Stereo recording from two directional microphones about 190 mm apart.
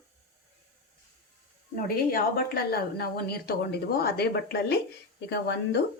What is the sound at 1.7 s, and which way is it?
A woman's voice, 50° left (ahead or behind).